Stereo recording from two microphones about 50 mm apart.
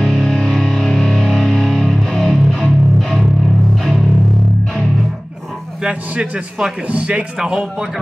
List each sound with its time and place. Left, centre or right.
0.0 s music: centre
5.9 s a man's voice: right